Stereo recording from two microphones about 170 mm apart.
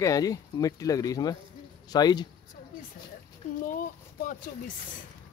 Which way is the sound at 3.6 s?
55° left (ahead or behind).